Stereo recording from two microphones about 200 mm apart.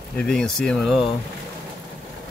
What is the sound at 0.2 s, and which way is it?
Speech, 5° left (ahead or behind).